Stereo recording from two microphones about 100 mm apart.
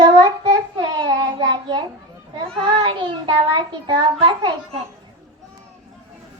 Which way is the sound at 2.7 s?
65° right (ahead or behind).